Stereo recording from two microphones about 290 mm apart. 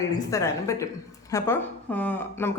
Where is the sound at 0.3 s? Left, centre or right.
Centre.